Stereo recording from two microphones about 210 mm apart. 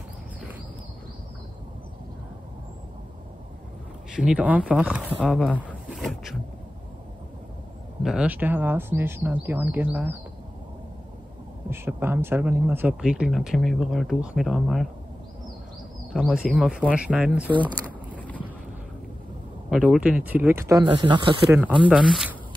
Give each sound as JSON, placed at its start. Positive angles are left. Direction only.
{"t": 4.2, "sound": "speech", "side_deg": -5}
{"t": 5.9, "sound": "a sound", "side_deg": 0}
{"t": 8.0, "sound": "speech", "side_deg": -5}
{"t": 11.7, "sound": "speech", "side_deg": -10}
{"t": 16.1, "sound": "speech", "side_deg": 0}
{"t": 17.5, "sound": "speech", "side_deg": -20}
{"t": 18.1, "sound": "boat", "side_deg": 5}
{"t": 19.7, "sound": "speech", "side_deg": -5}
{"t": 21.5, "sound": "speech", "side_deg": -10}